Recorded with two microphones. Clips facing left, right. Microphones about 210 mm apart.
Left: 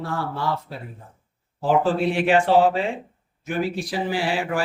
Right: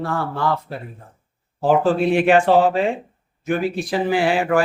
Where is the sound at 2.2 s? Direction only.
55° right (ahead or behind).